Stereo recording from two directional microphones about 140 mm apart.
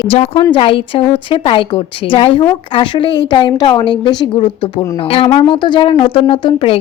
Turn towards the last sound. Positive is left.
turn(degrees=40)  # may be behind; listen again after turning